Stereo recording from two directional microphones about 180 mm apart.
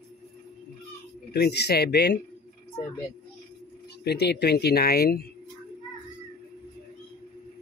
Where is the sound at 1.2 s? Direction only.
65° left (ahead or behind).